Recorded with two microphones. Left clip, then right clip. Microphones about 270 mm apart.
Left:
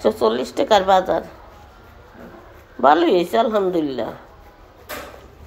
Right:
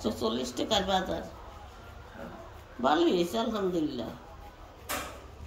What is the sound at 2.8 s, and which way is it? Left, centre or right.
Speech, left.